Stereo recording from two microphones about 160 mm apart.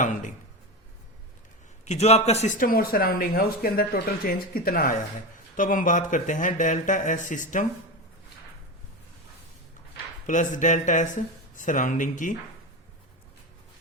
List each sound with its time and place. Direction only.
0.0 s speech: 50° left (ahead or behind)
1.8 s speech: 45° left (ahead or behind)
2.6 s speech: 65° left (ahead or behind)
10.2 s speech: 50° left (ahead or behind)